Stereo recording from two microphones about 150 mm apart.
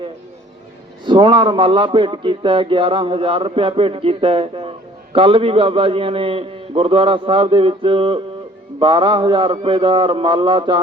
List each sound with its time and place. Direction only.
1.0 s a man's voice: 35° right (ahead or behind)